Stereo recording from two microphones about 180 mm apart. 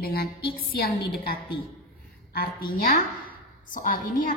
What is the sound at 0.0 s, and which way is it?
A woman's voice, 60° left (ahead or behind).